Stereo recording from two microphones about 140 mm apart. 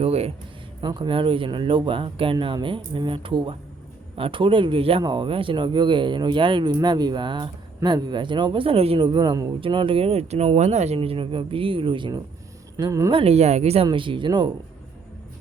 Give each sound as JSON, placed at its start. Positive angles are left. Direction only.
{"t": 0.0, "sound": "a sound", "side_deg": -45}
{"t": 0.8, "sound": "speech", "side_deg": -35}
{"t": 12.7, "sound": "speech", "side_deg": -25}
{"t": 13.1, "sound": "speech", "side_deg": -40}
{"t": 13.8, "sound": "speech", "side_deg": -35}